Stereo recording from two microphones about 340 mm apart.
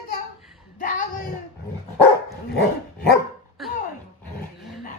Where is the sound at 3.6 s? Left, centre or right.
Centre.